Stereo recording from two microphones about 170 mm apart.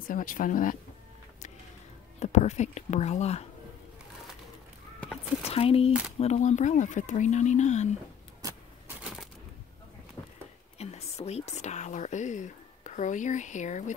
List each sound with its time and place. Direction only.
0.1 s speech: 55° left (ahead or behind)
2.1 s speech: 40° left (ahead or behind)
5.4 s speech: 35° left (ahead or behind)
8.4 s vehicle: 20° right (ahead or behind)
10.2 s a sound: 15° left (ahead or behind)
10.8 s speech: 40° left (ahead or behind)